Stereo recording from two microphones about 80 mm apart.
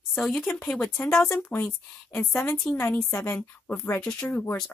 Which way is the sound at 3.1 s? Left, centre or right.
Left.